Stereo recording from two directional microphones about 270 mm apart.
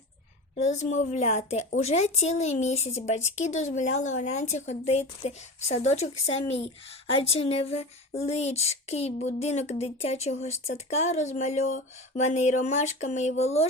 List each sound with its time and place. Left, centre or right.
0.5 s speech: left